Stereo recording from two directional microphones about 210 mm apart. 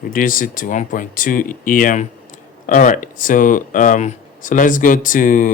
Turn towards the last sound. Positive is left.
turn(degrees=40)  # may be behind; listen again after turning